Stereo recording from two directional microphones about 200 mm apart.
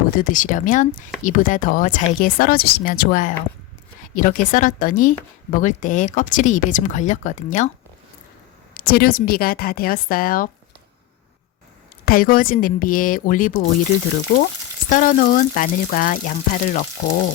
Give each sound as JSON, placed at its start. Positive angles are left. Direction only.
{"t": 0.2, "sound": "a woman's voice", "side_deg": 40}
{"t": 8.7, "sound": "speech", "side_deg": 50}
{"t": 12.0, "sound": "speech", "side_deg": 45}
{"t": 14.8, "sound": "a woman's voice", "side_deg": 40}